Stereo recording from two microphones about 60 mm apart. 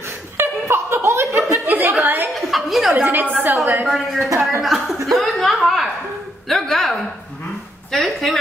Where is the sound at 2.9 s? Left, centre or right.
Right.